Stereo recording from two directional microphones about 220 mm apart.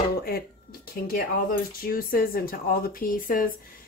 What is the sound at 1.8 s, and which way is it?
Speech, 40° left (ahead or behind).